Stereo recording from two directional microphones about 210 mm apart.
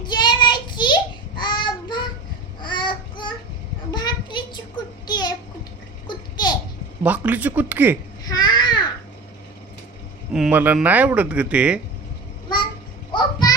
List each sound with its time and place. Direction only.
0.0 s child singing: 20° left (ahead or behind)
5.0 s a sound: 20° left (ahead or behind)
7.0 s speech: 5° right (ahead or behind)
8.3 s babbling: 20° left (ahead or behind)
10.3 s speech: 5° right (ahead or behind)
13.1 s a sound: 20° left (ahead or behind)